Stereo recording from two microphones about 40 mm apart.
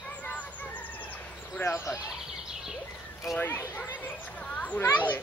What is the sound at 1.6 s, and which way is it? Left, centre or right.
Speech, left.